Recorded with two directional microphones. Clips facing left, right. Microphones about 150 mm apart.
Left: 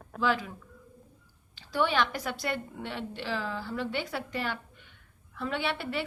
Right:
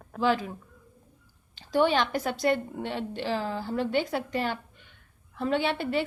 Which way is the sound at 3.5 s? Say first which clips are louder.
Right 5 dB; 40° right (ahead or behind).